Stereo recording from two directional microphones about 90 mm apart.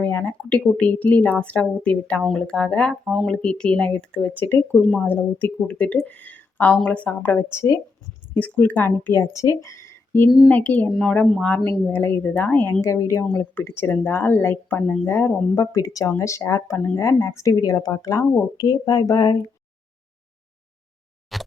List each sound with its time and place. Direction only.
0.0 s speech: 15° left (ahead or behind)
3.0 s speech: 10° right (ahead or behind)
3.2 s speech: 10° left (ahead or behind)
4.8 s speech: centre (ahead or behind)
5.0 s speech: 15° left (ahead or behind)
7.5 s speech: 30° left (ahead or behind)
8.3 s speech: 15° left (ahead or behind)
10.2 s speech: 5° right (ahead or behind)
10.5 s speech: 15° left (ahead or behind)
12.8 s speech: 35° left (ahead or behind); by 15.0 s 15° left (ahead or behind)
15.0 s speech: 30° left (ahead or behind); by 19.4 s 50° left (ahead or behind)
21.3 s plop: centre (ahead or behind)